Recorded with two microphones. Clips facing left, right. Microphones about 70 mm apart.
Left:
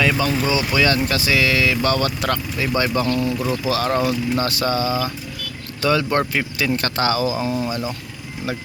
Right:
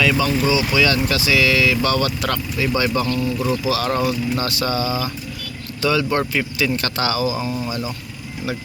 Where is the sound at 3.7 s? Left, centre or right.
Left.